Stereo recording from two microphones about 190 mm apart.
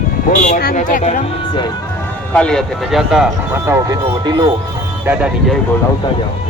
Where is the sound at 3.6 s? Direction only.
15° right (ahead or behind).